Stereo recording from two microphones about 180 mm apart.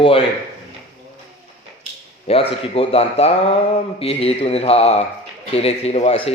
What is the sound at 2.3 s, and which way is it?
A man's voice, 30° left (ahead or behind).